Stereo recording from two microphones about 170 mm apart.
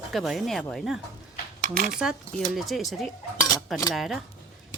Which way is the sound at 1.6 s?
50° right (ahead or behind).